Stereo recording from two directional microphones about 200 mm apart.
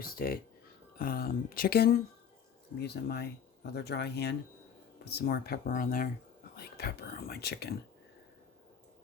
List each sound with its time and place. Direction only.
0.0 s speech: 45° left (ahead or behind)